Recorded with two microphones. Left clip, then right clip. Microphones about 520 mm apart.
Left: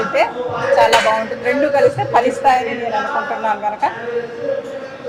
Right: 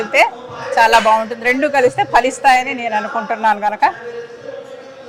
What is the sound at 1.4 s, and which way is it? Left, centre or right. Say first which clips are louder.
Speech: even; right.